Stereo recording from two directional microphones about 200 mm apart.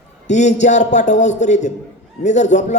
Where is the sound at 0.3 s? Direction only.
35° left (ahead or behind).